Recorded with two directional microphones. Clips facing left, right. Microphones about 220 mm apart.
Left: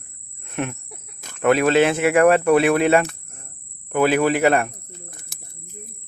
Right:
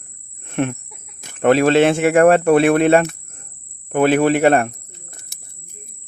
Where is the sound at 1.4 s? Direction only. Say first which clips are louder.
Right 3 dB; 30° right (ahead or behind).